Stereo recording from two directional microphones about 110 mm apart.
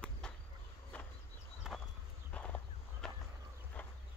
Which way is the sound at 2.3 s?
10° left (ahead or behind).